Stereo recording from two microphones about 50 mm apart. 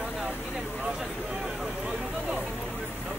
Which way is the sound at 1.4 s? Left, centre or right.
Centre.